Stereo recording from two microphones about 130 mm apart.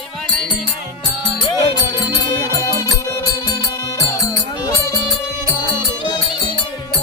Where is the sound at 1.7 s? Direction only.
30° left (ahead or behind).